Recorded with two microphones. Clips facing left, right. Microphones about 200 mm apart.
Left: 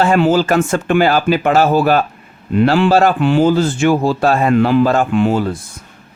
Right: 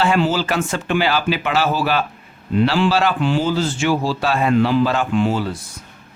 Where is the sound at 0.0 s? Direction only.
50° left (ahead or behind).